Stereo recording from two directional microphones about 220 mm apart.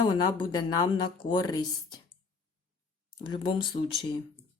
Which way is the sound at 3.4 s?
20° left (ahead or behind).